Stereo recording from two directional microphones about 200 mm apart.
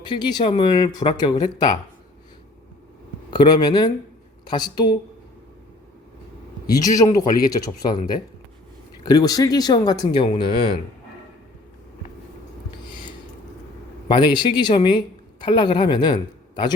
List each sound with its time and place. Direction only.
0.0 s speech: 20° left (ahead or behind)
3.2 s speech: 25° left (ahead or behind)
6.7 s speech: 20° left (ahead or behind)
9.0 s speech: 20° left (ahead or behind)
14.1 s speech: 20° left (ahead or behind)